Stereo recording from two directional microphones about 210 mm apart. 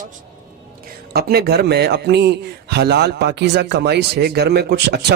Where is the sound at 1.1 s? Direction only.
50° right (ahead or behind).